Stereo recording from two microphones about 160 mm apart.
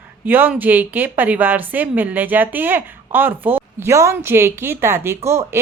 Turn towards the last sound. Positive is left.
turn(degrees=-15)  # may be behind; listen again after turning